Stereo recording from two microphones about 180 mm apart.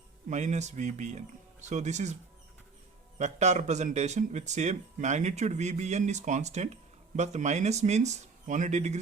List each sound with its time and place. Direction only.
0.3 s speech: 40° right (ahead or behind)
3.2 s speech: 40° right (ahead or behind)